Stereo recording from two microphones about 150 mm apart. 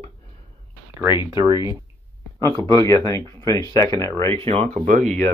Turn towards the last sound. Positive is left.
turn(degrees=-60)  # may be behind; listen again after turning